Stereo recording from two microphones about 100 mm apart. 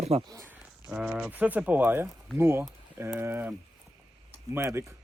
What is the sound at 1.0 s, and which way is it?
Speech, 5° right (ahead or behind).